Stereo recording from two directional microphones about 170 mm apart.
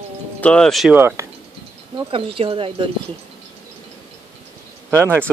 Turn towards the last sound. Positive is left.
turn(degrees=-15)  # may be behind; listen again after turning